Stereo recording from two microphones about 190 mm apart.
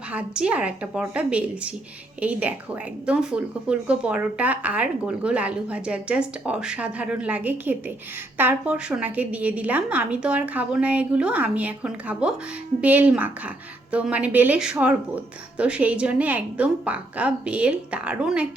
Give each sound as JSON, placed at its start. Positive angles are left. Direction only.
{"t": 0.1, "sound": "speech", "side_deg": -5}